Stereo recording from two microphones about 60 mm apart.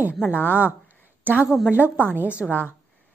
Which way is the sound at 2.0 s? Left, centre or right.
Left.